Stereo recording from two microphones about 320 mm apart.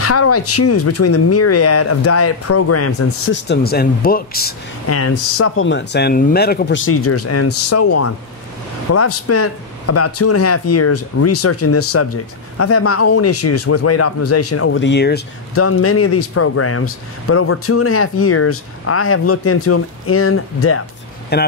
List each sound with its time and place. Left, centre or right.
0.0 s speech: left
3.4 s speech: left
4.8 s speech: left
15.5 s speech: left
21.3 s speech: left